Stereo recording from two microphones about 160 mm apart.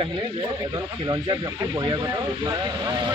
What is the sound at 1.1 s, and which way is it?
Speech, 25° right (ahead or behind).